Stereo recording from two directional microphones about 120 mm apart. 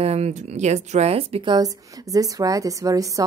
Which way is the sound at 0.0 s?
60° right (ahead or behind).